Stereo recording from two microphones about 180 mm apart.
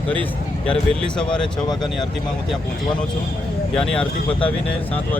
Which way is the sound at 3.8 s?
5° left (ahead or behind).